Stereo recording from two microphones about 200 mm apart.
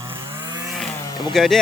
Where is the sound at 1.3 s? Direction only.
Centre (ahead or behind).